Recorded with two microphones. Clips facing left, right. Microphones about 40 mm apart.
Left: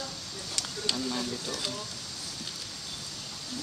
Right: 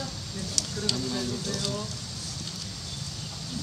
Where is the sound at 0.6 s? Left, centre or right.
Left.